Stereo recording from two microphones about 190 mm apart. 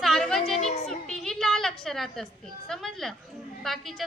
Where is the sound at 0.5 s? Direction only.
35° left (ahead or behind).